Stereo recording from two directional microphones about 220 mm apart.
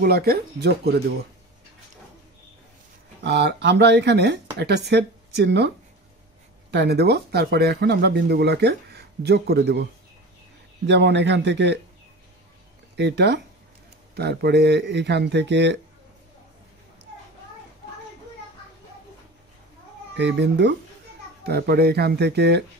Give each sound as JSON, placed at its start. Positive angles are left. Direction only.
{"t": 0.0, "sound": "speech", "side_deg": -45}
{"t": 3.3, "sound": "speech", "side_deg": -50}
{"t": 6.7, "sound": "speech", "side_deg": -50}
{"t": 10.9, "sound": "speech", "side_deg": -55}
{"t": 12.9, "sound": "speech", "side_deg": -50}
{"t": 20.2, "sound": "speech", "side_deg": -50}